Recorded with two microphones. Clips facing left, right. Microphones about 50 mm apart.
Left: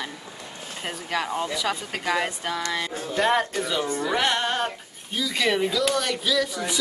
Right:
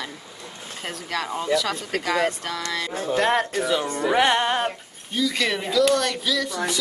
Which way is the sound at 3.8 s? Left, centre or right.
Right.